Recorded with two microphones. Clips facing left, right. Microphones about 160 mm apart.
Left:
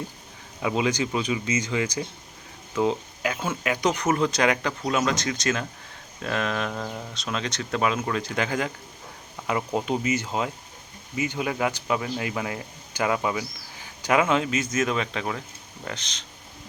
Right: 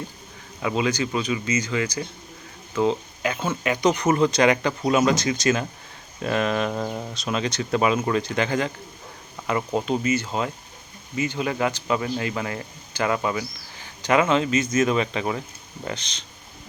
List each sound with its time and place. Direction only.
0.6 s speech: 15° left (ahead or behind); by 6.7 s 5° right (ahead or behind)
6.7 s speech: 15° right (ahead or behind); by 16.2 s centre (ahead or behind)